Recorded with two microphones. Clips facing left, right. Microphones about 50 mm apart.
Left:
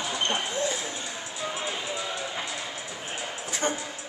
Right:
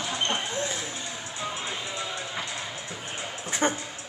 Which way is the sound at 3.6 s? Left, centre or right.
Right.